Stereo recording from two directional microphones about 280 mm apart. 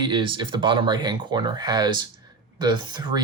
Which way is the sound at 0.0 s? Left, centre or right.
Centre.